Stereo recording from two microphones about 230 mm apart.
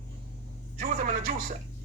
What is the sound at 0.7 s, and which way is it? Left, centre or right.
Speech, right.